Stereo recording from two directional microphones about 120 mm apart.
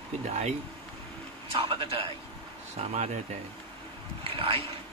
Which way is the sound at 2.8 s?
60° right (ahead or behind).